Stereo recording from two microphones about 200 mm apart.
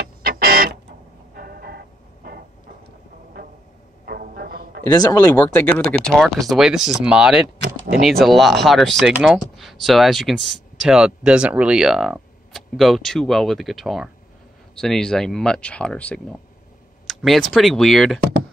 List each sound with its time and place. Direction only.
0.2 s printer: 50° right (ahead or behind)
1.3 s music: 50° right (ahead or behind)
4.0 s music: 50° right (ahead or behind)
5.0 s speech: 20° left (ahead or behind)
5.4 s speech: 10° left (ahead or behind)